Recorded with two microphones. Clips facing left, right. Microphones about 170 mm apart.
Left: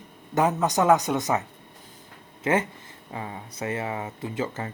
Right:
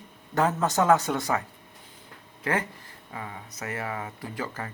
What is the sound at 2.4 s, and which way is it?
Speech, 20° left (ahead or behind).